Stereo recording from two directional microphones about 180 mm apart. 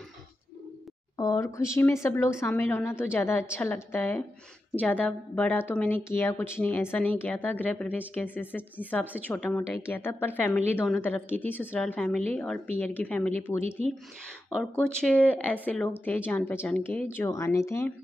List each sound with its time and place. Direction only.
1.1 s a woman's voice: 20° left (ahead or behind)